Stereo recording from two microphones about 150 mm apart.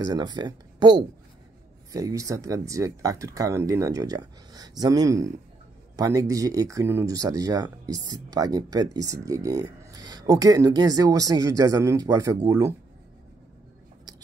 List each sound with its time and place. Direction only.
0.0 s speech: 30° right (ahead or behind)